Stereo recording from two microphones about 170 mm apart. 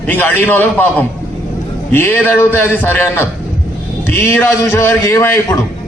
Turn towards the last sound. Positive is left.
turn(degrees=15)  # may be behind; listen again after turning